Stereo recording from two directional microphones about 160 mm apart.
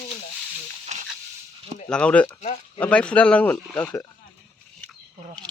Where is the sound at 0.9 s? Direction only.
45° right (ahead or behind).